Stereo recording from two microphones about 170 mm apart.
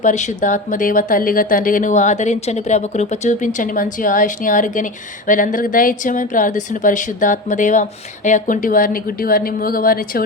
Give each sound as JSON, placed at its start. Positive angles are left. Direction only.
{"t": 0.0, "sound": "speech", "side_deg": 45}